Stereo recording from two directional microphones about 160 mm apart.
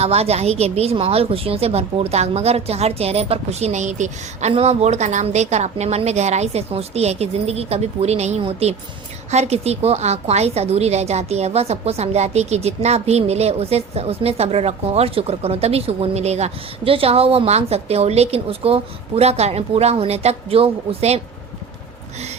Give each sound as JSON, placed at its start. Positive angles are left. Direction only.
{"t": 0.0, "sound": "a woman's voice", "side_deg": -40}